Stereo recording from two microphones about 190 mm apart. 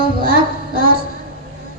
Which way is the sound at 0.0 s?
50° right (ahead or behind).